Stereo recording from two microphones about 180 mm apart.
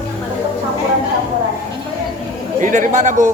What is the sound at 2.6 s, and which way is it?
Speech, 45° right (ahead or behind).